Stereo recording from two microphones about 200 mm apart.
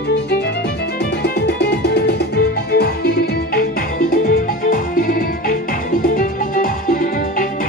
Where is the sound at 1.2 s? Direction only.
55° left (ahead or behind).